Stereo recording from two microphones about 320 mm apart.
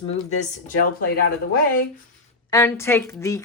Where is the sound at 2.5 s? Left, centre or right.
Centre.